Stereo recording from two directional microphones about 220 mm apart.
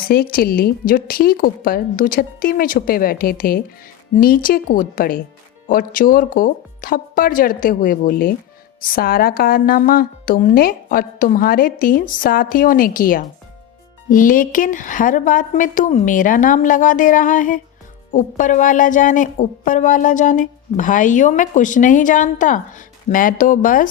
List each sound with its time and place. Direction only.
0.1 s a woman's voice: 45° left (ahead or behind)